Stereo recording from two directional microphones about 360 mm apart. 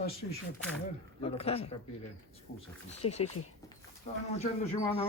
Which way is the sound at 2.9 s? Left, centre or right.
Centre.